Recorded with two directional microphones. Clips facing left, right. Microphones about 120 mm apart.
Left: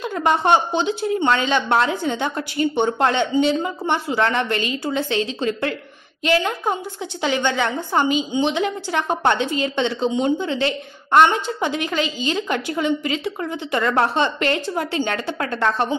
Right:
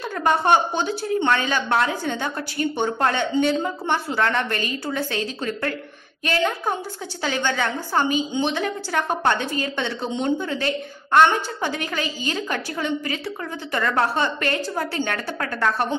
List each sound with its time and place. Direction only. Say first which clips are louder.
0.0 s a woman's voice: left 2 dB; 20° left (ahead or behind)